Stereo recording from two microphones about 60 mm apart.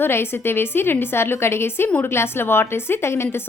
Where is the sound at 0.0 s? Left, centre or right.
Left.